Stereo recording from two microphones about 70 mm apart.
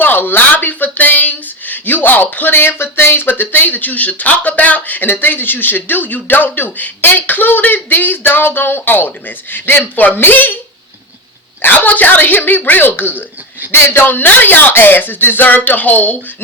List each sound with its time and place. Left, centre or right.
0.0 s speech: left
11.6 s speech: left